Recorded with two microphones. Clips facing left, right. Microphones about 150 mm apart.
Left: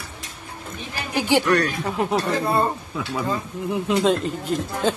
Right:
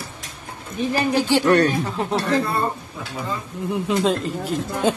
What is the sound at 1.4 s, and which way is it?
Speech, 25° right (ahead or behind).